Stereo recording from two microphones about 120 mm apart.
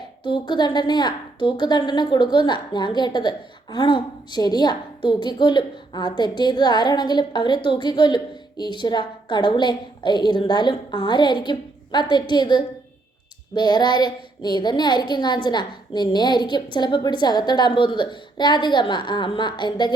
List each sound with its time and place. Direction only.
0.3 s a woman's voice: 40° left (ahead or behind)